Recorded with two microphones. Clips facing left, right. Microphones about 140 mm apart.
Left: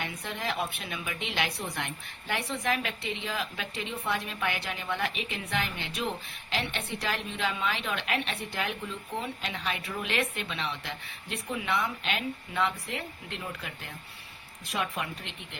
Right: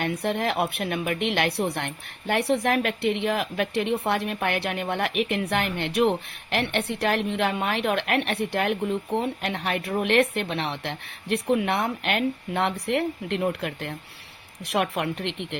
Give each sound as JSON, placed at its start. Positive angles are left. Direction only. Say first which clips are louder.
{"t": 0.0, "sound": "a woman's voice", "louder": "right 10 dB", "side_deg": -65}